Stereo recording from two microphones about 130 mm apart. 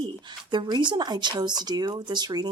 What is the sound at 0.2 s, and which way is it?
Speech, 35° right (ahead or behind).